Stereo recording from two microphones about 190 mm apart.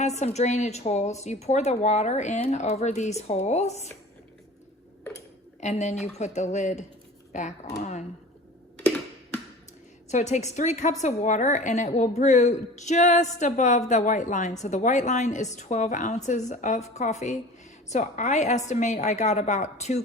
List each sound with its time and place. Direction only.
0.0 s a woman's voice: 35° left (ahead or behind)
5.5 s a woman's voice: 35° left (ahead or behind)
10.1 s a woman's voice: 35° left (ahead or behind)